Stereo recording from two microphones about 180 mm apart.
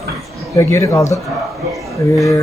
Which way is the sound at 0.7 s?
15° left (ahead or behind).